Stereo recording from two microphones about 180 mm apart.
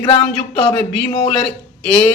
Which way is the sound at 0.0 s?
25° left (ahead or behind).